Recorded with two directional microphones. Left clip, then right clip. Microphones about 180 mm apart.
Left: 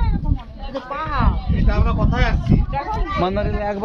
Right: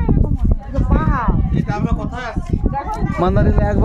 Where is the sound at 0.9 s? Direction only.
45° right (ahead or behind).